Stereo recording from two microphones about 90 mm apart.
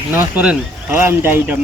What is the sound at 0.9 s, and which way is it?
Speech, 25° right (ahead or behind).